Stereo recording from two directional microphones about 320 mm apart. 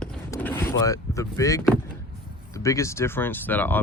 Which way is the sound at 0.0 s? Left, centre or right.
Centre.